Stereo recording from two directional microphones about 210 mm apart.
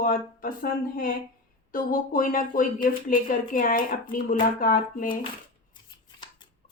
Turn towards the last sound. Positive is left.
turn(degrees=40)  # may be behind; listen again after turning